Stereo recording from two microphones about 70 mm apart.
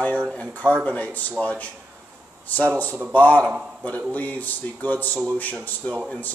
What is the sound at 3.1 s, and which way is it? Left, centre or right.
Speech, left.